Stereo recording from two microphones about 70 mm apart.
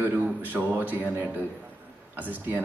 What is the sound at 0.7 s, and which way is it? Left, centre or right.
Speech, right.